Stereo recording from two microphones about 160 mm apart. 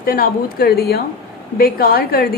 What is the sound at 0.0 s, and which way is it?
A woman's voice, 65° left (ahead or behind).